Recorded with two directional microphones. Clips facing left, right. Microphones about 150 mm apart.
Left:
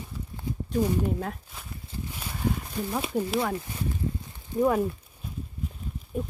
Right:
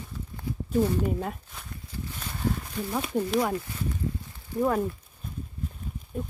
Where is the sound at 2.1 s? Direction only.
10° left (ahead or behind).